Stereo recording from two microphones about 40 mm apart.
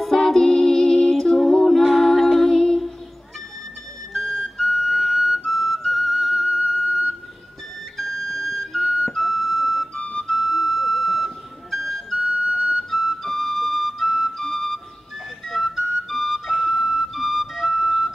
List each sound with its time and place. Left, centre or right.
0.0 s music: centre
2.0 s a capella: centre
4.1 s music: centre
5.5 s flute: centre; by 6.7 s right
6.9 s a sound: right
8.0 s music: centre
8.8 s flute: right
9.1 s flute: centre
10.2 s music: centre
12.2 s flute: right
12.9 s flute: centre
13.2 s music: centre
14.3 s flute: centre
15.4 s flute: centre